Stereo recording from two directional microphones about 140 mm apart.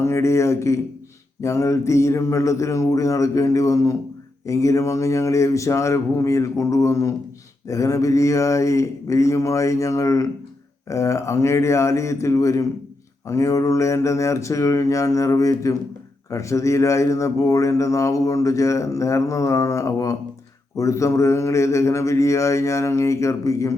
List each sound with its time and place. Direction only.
0.0 s a man's voice: 20° left (ahead or behind)